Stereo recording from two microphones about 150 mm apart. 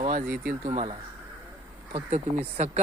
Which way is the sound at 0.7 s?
40° right (ahead or behind).